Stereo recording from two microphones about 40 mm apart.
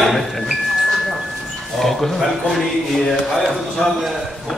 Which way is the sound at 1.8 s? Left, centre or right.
Centre.